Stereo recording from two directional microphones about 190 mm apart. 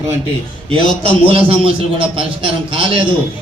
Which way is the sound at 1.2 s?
30° right (ahead or behind).